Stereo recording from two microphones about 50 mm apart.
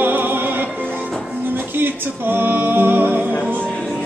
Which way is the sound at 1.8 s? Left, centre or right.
Right.